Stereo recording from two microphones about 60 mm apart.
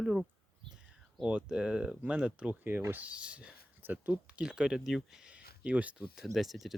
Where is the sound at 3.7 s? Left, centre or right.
Right.